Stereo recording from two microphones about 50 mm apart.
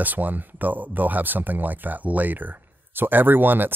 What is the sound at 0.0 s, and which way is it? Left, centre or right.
Speech, right.